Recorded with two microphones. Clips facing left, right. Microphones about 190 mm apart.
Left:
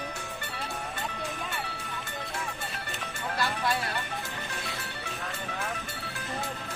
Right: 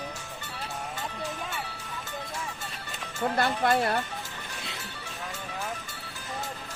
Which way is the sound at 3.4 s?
55° right (ahead or behind).